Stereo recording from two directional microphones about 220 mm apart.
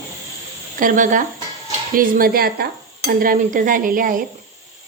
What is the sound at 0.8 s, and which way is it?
Speech, 35° right (ahead or behind).